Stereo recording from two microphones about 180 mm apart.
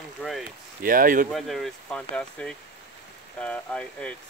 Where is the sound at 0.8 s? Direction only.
50° right (ahead or behind).